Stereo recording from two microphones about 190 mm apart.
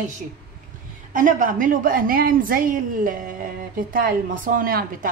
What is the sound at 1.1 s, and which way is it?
A woman's voice, 45° right (ahead or behind).